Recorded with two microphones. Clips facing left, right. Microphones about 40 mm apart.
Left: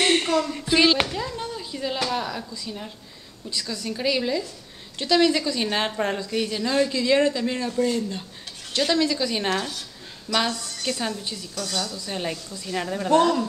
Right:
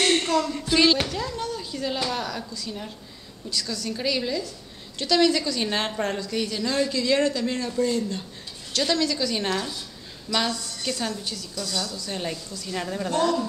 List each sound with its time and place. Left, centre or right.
0.0 s a sound: centre
1.0 s a woman's voice: centre; by 11.9 s left
11.9 s speech: centre
13.1 s a woman's voice: left